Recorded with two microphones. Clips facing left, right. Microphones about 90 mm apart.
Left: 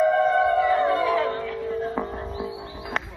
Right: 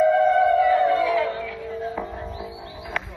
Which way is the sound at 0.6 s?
35° left (ahead or behind).